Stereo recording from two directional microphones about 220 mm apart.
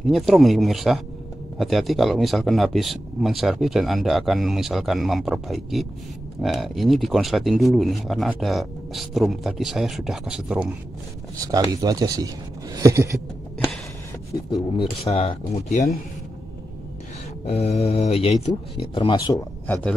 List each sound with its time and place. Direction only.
0.0 s speech: centre (ahead or behind)
11.3 s speech: 15° right (ahead or behind)
15.0 s speech: 25° left (ahead or behind)
17.5 s speech: 30° left (ahead or behind)